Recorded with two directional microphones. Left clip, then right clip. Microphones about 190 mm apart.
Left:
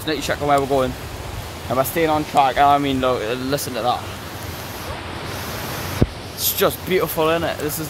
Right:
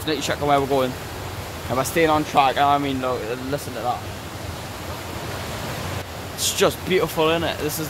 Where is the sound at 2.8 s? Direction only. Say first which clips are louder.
Left 4 dB; 45° left (ahead or behind).